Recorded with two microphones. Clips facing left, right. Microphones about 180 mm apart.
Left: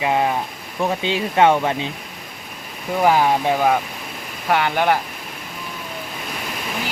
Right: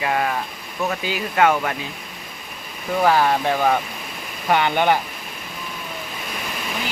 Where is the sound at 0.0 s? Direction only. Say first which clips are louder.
Left 3 dB; 20° left (ahead or behind).